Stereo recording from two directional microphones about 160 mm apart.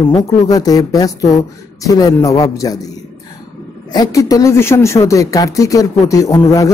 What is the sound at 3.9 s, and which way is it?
Speech, 20° left (ahead or behind).